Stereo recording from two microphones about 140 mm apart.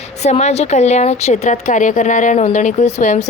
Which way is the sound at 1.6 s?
65° left (ahead or behind).